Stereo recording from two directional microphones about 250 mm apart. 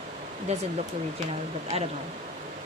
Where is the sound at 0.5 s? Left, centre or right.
Right.